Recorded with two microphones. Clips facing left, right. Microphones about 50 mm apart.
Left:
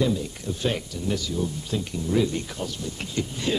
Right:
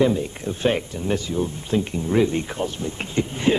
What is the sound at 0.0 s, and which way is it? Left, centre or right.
Speech, right.